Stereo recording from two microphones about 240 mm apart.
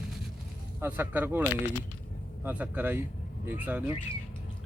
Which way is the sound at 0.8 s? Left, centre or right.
Centre.